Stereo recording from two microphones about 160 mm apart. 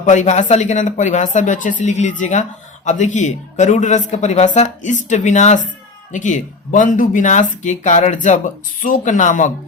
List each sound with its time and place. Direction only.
0.0 s speech: 50° left (ahead or behind)